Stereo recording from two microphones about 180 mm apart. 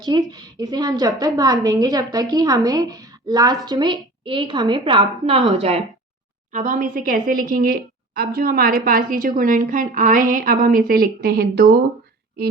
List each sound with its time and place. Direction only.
0.0 s a woman's voice: 25° right (ahead or behind); by 11.8 s 60° right (ahead or behind)